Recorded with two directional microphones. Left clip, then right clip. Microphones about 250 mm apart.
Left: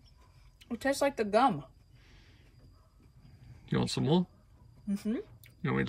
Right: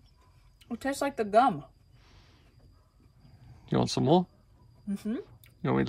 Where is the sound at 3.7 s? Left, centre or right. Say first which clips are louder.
Right 6 dB; centre.